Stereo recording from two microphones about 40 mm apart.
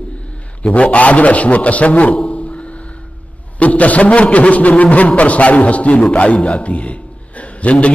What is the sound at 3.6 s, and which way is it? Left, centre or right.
A man's voice, left.